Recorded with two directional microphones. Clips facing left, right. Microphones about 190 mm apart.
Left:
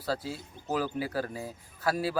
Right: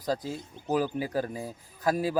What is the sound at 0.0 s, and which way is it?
A man's voice, 15° right (ahead or behind).